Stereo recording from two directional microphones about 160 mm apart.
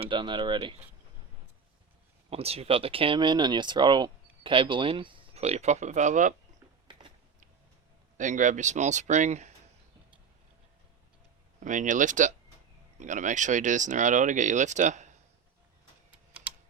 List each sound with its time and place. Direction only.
0.0 s speech: 30° right (ahead or behind)
2.3 s speech: 40° right (ahead or behind)
8.2 s speech: 50° right (ahead or behind)
11.6 s speech: 50° right (ahead or behind)
16.3 s typing: 5° right (ahead or behind)